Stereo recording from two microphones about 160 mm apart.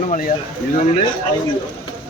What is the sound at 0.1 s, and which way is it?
Speech, 50° left (ahead or behind).